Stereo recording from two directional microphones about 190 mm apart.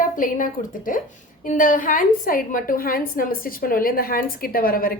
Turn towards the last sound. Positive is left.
turn(degrees=50)  # may be behind; listen again after turning